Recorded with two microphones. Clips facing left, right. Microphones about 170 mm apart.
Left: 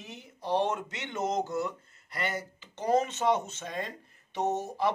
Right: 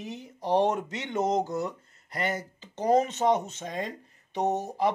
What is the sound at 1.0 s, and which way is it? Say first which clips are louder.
Speech: right 5 dB; 15° right (ahead or behind).